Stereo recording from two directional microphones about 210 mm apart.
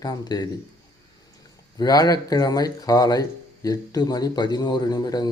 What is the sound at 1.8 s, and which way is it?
Speech, 20° left (ahead or behind).